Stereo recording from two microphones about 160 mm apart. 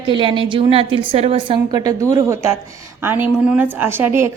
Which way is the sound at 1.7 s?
20° right (ahead or behind).